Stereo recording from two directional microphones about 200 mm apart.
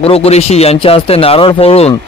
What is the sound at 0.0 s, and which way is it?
Speech, 30° left (ahead or behind).